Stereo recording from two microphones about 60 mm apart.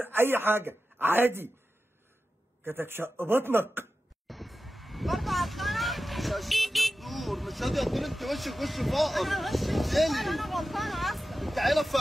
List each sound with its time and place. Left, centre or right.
0.0 s speech: right
2.6 s speech: right
4.3 s vehicle: centre